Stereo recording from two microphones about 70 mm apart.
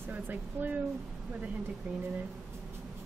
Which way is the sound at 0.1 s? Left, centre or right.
Right.